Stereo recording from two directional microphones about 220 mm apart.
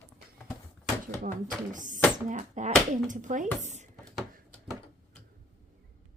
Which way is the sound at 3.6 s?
30° right (ahead or behind).